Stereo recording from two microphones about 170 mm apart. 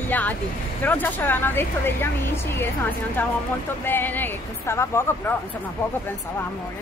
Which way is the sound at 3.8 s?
10° left (ahead or behind).